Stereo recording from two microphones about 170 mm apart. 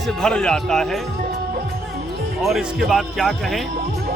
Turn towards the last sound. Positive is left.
turn(degrees=0)  # may be behind; listen again after turning